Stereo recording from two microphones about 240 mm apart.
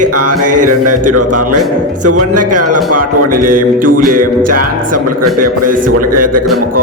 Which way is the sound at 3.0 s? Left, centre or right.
Right.